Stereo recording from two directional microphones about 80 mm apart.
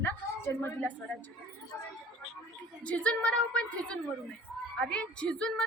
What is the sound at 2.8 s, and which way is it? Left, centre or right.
A woman's voice, centre.